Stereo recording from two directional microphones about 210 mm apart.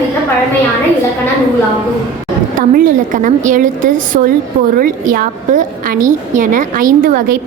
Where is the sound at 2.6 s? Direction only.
40° right (ahead or behind).